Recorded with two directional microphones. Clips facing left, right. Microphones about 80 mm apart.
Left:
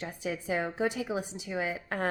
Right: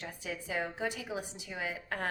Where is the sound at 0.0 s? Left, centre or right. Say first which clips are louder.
Left 6 dB; left.